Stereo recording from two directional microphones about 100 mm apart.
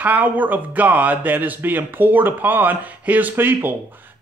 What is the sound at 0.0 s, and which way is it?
Speech, 15° right (ahead or behind).